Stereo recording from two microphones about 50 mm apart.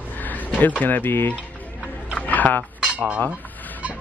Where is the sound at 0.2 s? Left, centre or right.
Left.